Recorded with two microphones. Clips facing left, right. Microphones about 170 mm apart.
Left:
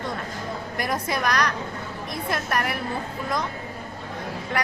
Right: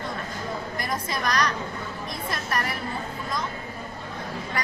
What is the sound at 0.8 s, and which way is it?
A woman's voice, 65° left (ahead or behind).